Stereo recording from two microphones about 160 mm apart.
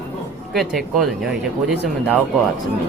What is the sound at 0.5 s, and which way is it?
Speech, centre (ahead or behind).